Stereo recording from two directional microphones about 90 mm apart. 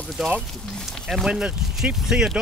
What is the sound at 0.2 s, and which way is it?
Speech, 5° right (ahead or behind).